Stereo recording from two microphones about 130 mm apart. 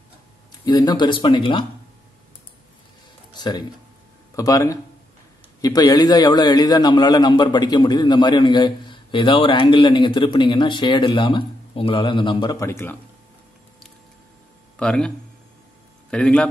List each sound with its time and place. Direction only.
0.7 s a man's voice: 30° left (ahead or behind)
3.3 s a sound: 35° left (ahead or behind)
4.4 s a man's voice: 25° left (ahead or behind)
14.8 s speech: 5° left (ahead or behind)